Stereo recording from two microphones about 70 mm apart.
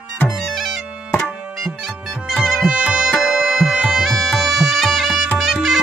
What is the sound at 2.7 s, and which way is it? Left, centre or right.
Music, centre.